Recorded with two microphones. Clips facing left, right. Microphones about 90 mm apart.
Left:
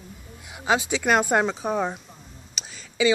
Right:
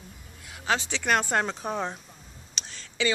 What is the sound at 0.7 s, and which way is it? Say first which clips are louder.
Speech: left 4 dB; 10° left (ahead or behind).